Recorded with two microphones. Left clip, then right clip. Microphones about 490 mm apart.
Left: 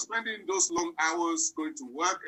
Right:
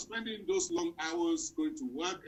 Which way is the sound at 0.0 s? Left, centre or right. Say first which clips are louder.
Left 6 dB; left.